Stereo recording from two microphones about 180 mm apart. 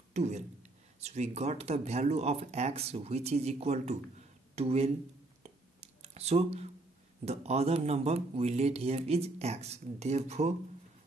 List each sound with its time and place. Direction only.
0.1 s speech: 40° right (ahead or behind)
5.4 s a sound: 35° right (ahead or behind)
7.2 s speech: 35° right (ahead or behind)